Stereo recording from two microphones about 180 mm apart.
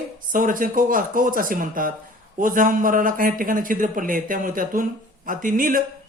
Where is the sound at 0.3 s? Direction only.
50° right (ahead or behind).